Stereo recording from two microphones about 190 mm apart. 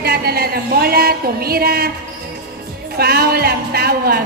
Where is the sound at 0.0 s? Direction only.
55° right (ahead or behind).